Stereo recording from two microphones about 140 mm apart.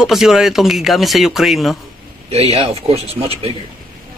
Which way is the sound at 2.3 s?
50° right (ahead or behind).